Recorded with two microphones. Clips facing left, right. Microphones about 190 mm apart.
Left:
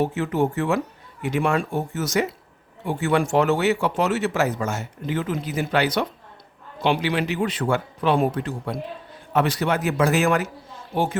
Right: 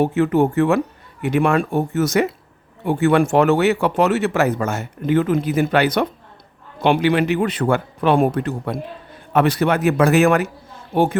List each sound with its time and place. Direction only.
0.0 s speech: 60° right (ahead or behind)